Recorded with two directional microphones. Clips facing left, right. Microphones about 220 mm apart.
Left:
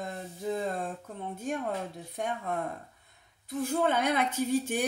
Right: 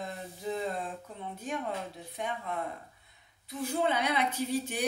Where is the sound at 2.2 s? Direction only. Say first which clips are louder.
Left 3 dB; 45° left (ahead or behind).